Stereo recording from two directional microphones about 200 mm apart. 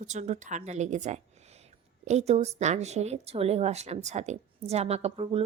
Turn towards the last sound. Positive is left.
turn(degrees=-30)  # may be behind; listen again after turning